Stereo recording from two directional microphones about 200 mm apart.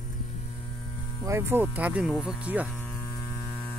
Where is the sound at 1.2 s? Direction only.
15° right (ahead or behind).